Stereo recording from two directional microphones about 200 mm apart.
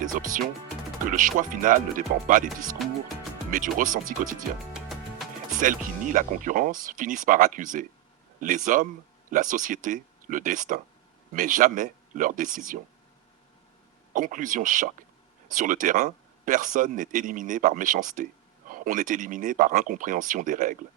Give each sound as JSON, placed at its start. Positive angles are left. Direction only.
{"t": 0.0, "sound": "speech", "side_deg": -40}
{"t": 3.5, "sound": "speech", "side_deg": -40}
{"t": 5.5, "sound": "speech", "side_deg": -40}
{"t": 14.1, "sound": "speech", "side_deg": -40}